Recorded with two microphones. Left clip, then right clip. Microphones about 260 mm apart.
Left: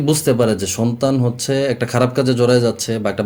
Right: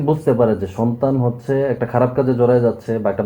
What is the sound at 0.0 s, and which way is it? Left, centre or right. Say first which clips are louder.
Speech: even; left.